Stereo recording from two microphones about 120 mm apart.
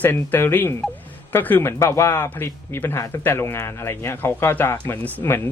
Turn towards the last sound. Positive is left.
turn(degrees=25)  # may be behind; listen again after turning